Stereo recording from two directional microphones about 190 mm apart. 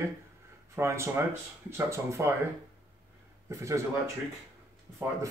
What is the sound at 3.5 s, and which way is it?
Speech, 15° right (ahead or behind).